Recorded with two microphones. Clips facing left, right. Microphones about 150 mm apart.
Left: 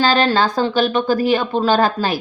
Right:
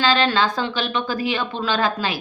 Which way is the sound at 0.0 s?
40° left (ahead or behind).